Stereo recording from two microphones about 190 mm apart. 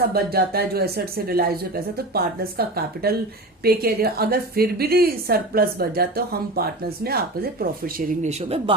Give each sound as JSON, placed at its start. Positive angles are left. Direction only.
{"t": 0.0, "sound": "a woman's voice", "side_deg": -55}